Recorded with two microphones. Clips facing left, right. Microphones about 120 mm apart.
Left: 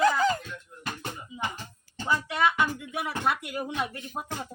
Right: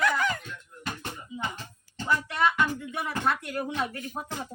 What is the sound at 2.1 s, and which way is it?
Speech, 15° left (ahead or behind).